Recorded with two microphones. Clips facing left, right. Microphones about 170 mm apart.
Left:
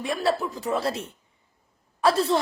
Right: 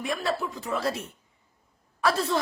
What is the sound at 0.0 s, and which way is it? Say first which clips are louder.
A woman's voice: left 4 dB; 30° left (ahead or behind).